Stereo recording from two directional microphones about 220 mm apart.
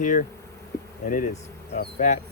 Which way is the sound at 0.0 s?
35° left (ahead or behind).